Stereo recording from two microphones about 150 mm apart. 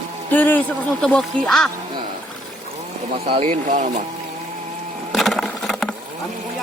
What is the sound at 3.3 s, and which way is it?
Speech, 50° right (ahead or behind).